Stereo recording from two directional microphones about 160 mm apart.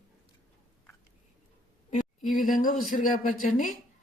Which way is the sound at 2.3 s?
55° left (ahead or behind).